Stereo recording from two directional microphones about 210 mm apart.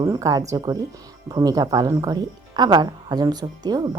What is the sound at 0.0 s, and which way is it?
A woman's voice, 15° right (ahead or behind).